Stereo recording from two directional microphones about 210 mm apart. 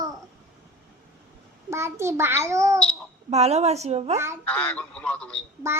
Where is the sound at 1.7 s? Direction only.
10° right (ahead or behind).